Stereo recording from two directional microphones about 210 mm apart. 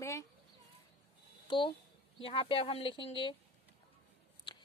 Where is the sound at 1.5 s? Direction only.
25° left (ahead or behind).